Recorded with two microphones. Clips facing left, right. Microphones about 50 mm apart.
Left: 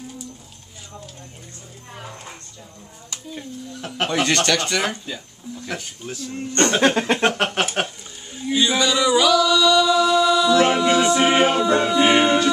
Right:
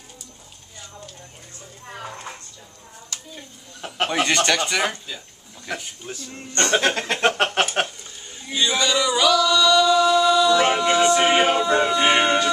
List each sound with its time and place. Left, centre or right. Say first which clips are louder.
3.8 s speech: even; centre
6.9 s speech: left 4 dB; centre
7.2 s a sound: right 1 dB; centre
8.4 s singing: left 3 dB; centre